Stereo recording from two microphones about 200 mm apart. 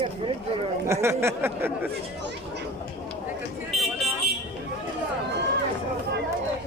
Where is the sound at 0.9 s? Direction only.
15° right (ahead or behind).